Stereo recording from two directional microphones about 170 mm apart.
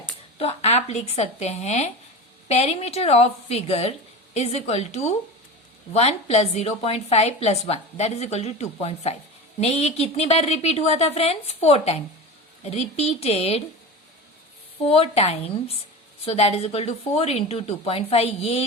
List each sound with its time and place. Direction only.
0.3 s a woman's voice: 40° left (ahead or behind)
14.8 s a woman's voice: 35° left (ahead or behind)